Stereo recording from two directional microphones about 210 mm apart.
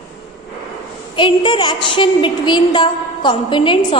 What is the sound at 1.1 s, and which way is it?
A woman's voice, 20° left (ahead or behind).